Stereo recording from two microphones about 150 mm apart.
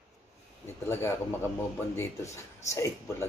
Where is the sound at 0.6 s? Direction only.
15° left (ahead or behind).